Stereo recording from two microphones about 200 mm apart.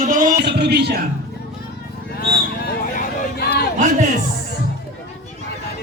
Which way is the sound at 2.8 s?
40° left (ahead or behind).